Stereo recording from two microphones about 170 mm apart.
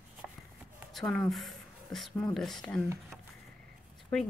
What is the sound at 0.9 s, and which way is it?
Speech, centre (ahead or behind).